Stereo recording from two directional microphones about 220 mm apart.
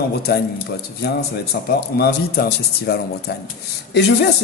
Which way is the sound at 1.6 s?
50° left (ahead or behind).